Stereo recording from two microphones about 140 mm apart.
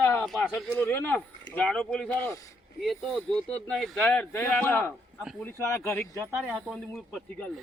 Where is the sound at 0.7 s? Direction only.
15° left (ahead or behind).